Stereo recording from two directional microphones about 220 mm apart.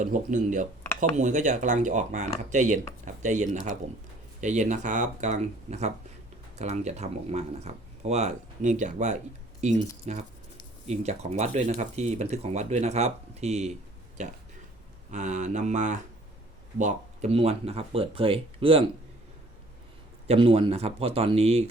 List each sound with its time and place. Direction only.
0.0 s speech: 35° right (ahead or behind)
15.1 s speech: 35° right (ahead or behind)
20.2 s speech: 25° right (ahead or behind)